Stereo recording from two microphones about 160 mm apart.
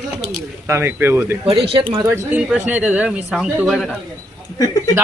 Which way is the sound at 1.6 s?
35° right (ahead or behind).